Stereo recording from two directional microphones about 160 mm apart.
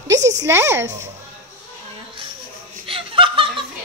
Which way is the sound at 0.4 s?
15° right (ahead or behind).